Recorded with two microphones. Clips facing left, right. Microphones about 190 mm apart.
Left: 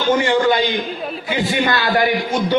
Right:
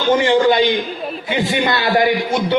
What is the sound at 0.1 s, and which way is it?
A man's voice, 20° right (ahead or behind).